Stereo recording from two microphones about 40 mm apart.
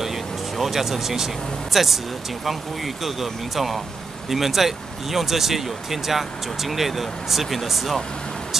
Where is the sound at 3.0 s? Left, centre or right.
Centre.